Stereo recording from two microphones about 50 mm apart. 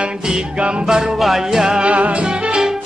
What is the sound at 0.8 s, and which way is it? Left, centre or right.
Music, centre.